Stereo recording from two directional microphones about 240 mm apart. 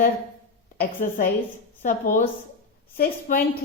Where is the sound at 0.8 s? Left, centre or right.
Left.